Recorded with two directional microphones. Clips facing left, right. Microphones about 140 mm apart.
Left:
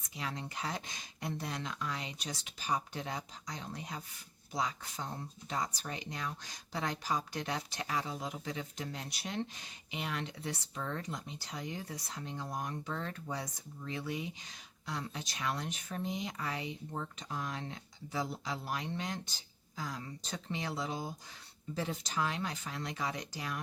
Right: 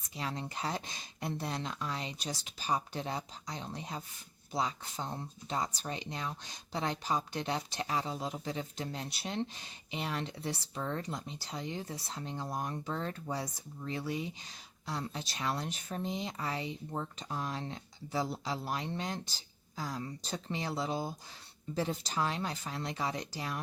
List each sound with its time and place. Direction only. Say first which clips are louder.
0.2 s speech: right 2 dB; 30° right (ahead or behind)